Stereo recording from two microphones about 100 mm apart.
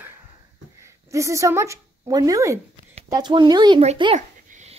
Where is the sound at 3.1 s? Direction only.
45° right (ahead or behind).